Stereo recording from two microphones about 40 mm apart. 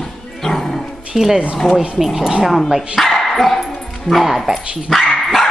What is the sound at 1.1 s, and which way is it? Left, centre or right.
Speech, centre.